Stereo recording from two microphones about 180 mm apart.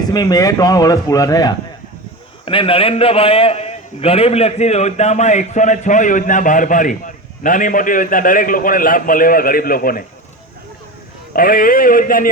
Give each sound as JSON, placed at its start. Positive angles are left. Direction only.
{"t": 0.0, "sound": "a man's voice", "side_deg": 20}
{"t": 11.3, "sound": "a man's voice", "side_deg": 55}